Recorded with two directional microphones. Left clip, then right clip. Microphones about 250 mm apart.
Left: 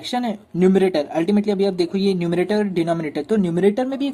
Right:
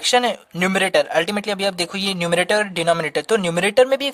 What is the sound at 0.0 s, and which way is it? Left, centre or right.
Speech, right.